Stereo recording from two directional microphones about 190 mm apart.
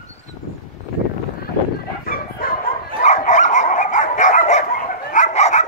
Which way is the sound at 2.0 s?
50° left (ahead or behind).